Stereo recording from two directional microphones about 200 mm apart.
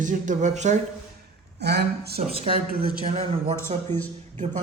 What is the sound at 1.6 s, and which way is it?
Speech, 55° right (ahead or behind).